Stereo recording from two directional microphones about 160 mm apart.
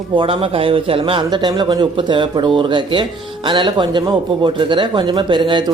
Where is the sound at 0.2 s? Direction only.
35° right (ahead or behind).